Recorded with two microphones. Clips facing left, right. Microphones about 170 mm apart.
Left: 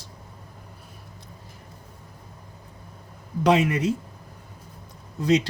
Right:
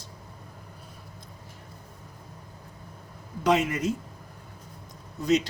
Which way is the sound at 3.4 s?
75° left (ahead or behind).